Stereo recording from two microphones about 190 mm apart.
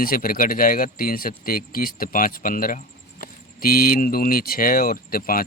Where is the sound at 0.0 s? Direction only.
50° left (ahead or behind).